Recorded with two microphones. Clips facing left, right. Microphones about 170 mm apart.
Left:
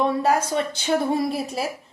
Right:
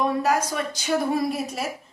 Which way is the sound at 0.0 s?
30° left (ahead or behind).